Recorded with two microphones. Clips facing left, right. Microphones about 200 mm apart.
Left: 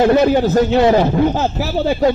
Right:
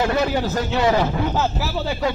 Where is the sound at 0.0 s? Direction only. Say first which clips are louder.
Left 8 dB; 40° left (ahead or behind).